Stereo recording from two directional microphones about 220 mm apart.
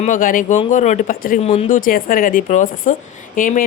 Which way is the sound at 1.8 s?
40° left (ahead or behind).